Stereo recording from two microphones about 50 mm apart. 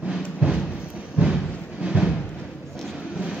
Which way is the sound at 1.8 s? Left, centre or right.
Centre.